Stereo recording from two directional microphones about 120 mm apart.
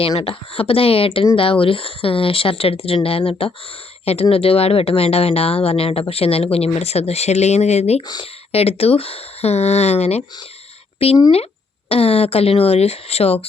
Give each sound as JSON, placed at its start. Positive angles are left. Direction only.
{"t": 0.2, "sound": "speech", "side_deg": 50}
{"t": 8.0, "sound": "speech", "side_deg": 35}
{"t": 8.5, "sound": "speech", "side_deg": 55}